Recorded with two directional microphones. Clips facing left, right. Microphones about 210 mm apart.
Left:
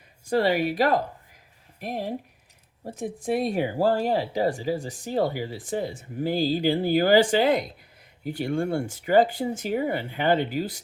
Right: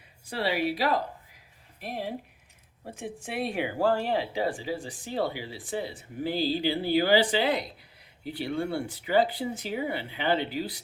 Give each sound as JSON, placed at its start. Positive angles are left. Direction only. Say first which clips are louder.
{"t": 0.3, "sound": "a woman's voice", "louder": "left 6 dB", "side_deg": 45}